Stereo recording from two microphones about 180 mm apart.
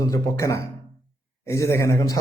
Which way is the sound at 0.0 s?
15° left (ahead or behind).